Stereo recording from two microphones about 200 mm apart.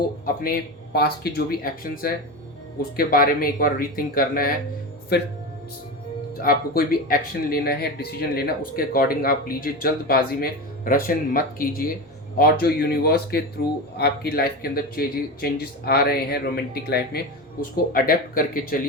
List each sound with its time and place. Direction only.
0.9 s speech: 50° left (ahead or behind)
6.3 s speech: 45° left (ahead or behind)